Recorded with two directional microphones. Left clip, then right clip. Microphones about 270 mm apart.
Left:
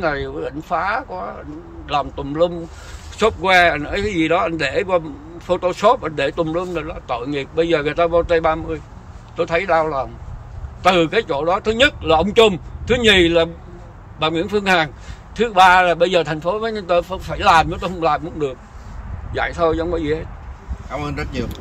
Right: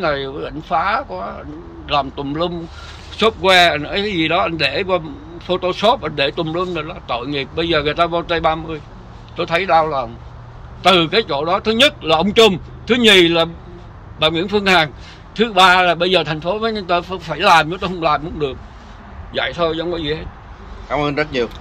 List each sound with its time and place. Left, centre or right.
0.0 s a man's voice: centre
20.9 s speech: centre